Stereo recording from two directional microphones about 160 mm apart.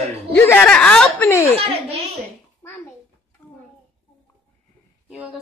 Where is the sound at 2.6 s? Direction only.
15° left (ahead or behind).